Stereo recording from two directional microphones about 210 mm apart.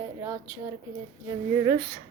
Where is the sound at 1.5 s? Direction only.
10° right (ahead or behind).